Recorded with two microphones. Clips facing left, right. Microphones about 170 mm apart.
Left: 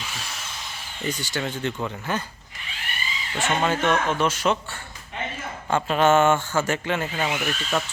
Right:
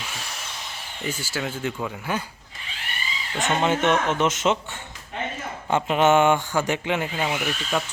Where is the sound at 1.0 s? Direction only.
5° right (ahead or behind).